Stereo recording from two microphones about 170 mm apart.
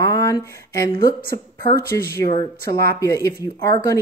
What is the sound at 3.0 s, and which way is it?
Speech, 20° left (ahead or behind).